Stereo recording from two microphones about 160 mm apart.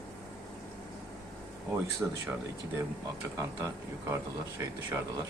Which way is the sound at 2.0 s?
10° right (ahead or behind).